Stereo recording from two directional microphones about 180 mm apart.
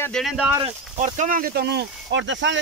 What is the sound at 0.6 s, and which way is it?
Speech, 40° right (ahead or behind).